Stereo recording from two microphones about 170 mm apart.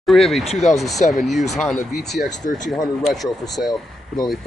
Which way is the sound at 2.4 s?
50° left (ahead or behind).